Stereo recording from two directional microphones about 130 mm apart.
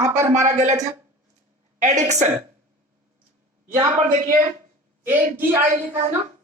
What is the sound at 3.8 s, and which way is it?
Speech, 65° right (ahead or behind).